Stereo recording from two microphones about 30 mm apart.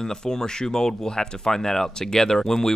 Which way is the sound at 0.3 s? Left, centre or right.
Centre.